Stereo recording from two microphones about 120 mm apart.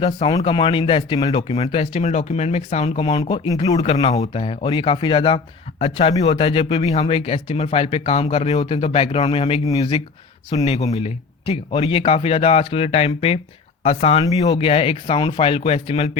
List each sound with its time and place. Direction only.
0.4 s speech: 45° left (ahead or behind)
1.5 s speech: 55° left (ahead or behind)
3.2 s speech: 35° left (ahead or behind)
4.2 s speech: 60° left (ahead or behind)
9.7 s speech: 40° left (ahead or behind)
10.5 s speech: 60° left (ahead or behind)